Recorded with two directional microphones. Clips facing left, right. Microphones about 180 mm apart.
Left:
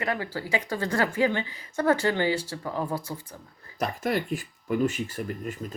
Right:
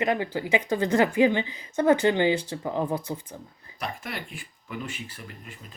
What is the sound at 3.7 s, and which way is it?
Speech, 45° left (ahead or behind).